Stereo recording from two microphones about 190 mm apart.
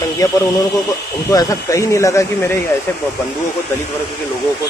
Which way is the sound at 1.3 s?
20° left (ahead or behind).